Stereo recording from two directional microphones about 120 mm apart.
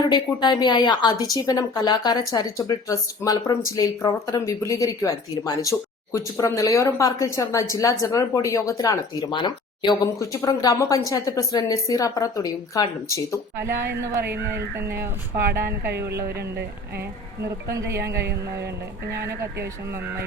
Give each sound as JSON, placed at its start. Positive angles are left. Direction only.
{"t": 0.1, "sound": "a woman's voice", "side_deg": 35}
{"t": 13.7, "sound": "speech", "side_deg": -20}
{"t": 17.7, "sound": "speech", "side_deg": -25}